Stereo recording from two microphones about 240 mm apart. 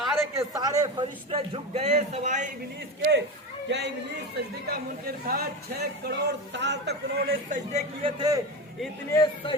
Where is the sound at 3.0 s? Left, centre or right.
Right.